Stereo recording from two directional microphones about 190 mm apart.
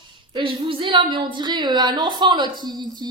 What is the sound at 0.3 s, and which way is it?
A woman's voice, 25° right (ahead or behind).